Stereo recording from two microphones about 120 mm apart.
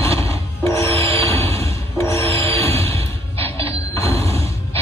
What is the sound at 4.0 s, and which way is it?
Mechanisms, 60° right (ahead or behind).